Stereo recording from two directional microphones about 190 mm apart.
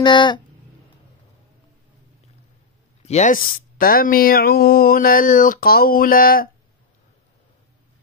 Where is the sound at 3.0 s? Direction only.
40° left (ahead or behind).